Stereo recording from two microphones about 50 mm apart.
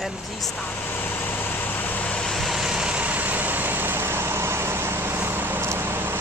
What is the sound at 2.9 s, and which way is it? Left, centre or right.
Vehicle, right.